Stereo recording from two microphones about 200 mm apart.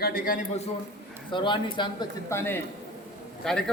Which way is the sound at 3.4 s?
5° left (ahead or behind).